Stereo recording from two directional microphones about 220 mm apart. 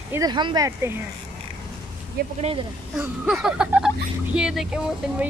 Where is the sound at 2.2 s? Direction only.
45° right (ahead or behind).